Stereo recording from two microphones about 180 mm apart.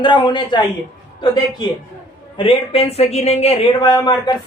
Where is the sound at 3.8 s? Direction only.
25° left (ahead or behind).